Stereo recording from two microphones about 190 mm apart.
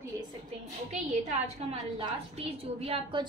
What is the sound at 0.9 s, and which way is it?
A woman's voice, 40° right (ahead or behind).